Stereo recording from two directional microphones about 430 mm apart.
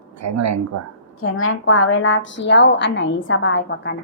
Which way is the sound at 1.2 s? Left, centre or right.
Left.